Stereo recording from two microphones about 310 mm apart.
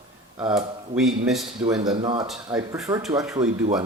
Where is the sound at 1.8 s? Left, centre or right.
Centre.